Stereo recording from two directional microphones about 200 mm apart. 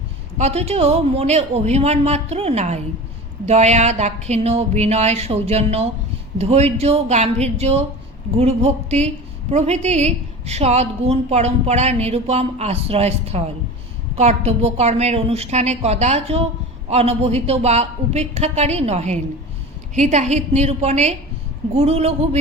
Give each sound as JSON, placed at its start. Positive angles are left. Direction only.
{"t": 0.3, "sound": "a woman's voice", "side_deg": -30}